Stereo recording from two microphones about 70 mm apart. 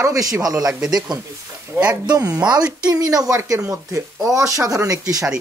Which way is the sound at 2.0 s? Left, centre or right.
Right.